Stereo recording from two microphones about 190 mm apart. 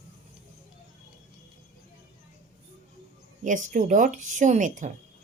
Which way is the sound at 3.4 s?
40° right (ahead or behind).